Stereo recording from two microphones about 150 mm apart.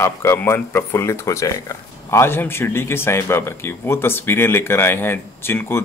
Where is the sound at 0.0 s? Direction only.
20° left (ahead or behind).